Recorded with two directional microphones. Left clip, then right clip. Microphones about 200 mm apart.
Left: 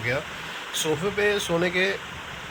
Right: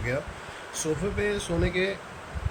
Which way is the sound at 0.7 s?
15° right (ahead or behind).